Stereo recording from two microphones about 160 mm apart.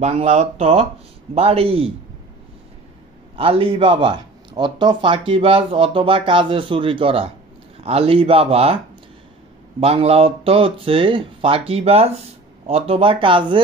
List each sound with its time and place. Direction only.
0.0 s speech: 45° right (ahead or behind)
3.3 s speech: 35° right (ahead or behind)
9.8 s speech: 40° right (ahead or behind)